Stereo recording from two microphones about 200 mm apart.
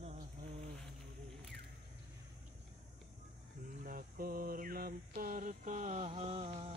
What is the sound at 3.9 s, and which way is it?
Mantra, 45° right (ahead or behind).